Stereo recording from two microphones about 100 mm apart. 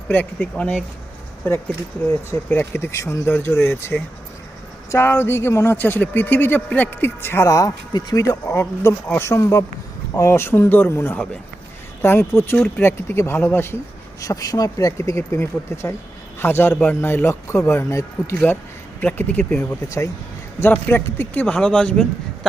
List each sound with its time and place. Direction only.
0.1 s a man's voice: 15° left (ahead or behind)
12.5 s a man's voice: 10° left (ahead or behind)
12.8 s speech: 25° left (ahead or behind)
14.2 s speech: 35° left (ahead or behind)
18.9 s a man's voice: 20° left (ahead or behind)